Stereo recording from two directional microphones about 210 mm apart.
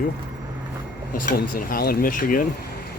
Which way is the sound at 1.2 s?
40° left (ahead or behind).